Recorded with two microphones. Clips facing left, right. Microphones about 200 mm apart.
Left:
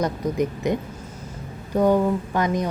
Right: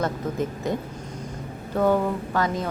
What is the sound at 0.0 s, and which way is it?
A woman's voice, 15° left (ahead or behind).